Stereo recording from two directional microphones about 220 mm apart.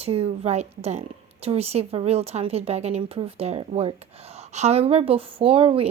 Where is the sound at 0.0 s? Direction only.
25° right (ahead or behind).